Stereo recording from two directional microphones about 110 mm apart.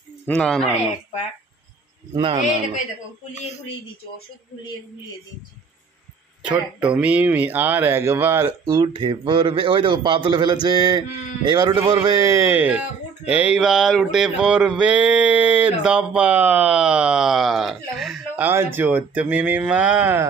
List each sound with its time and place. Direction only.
0.3 s speech: 5° left (ahead or behind)
2.1 s a man's voice: 45° right (ahead or behind)
6.5 s speech: 15° right (ahead or behind)
9.0 s a man's voice: 45° right (ahead or behind); by 12.5 s 25° right (ahead or behind)
12.5 s speech: 10° right (ahead or behind)
18.3 s speech: 20° right (ahead or behind)